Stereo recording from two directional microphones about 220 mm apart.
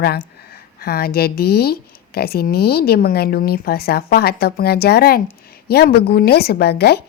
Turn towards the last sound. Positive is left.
turn(degrees=50)  # may be behind; listen again after turning